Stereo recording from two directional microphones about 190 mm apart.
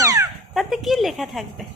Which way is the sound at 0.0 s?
15° right (ahead or behind).